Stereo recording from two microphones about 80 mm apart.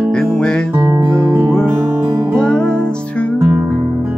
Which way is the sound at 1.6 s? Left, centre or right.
Right.